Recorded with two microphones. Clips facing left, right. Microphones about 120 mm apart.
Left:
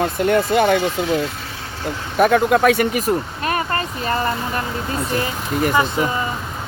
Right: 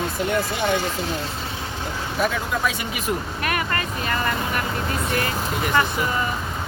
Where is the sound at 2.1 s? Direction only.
55° left (ahead or behind).